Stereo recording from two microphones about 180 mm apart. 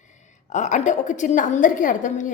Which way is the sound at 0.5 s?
40° left (ahead or behind).